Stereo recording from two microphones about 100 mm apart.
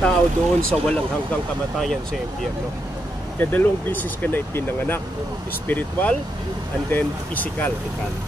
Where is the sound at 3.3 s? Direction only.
15° left (ahead or behind).